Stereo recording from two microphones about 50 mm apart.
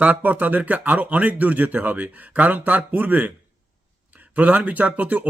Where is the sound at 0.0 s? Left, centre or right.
Right.